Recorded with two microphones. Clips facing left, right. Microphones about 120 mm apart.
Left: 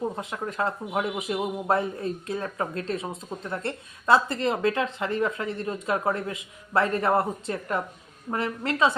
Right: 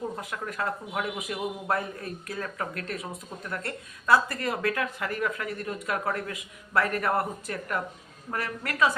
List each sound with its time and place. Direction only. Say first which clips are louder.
0.2 s speech: left 4 dB; 25° left (ahead or behind)